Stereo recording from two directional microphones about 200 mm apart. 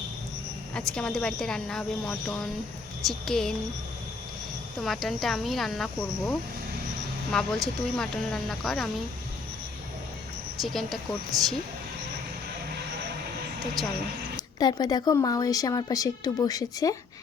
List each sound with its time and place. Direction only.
0.7 s speech: 5° left (ahead or behind)
4.8 s speech: centre (ahead or behind)
10.6 s speech: centre (ahead or behind)
13.8 s speech: centre (ahead or behind)
14.3 s speech: 20° left (ahead or behind)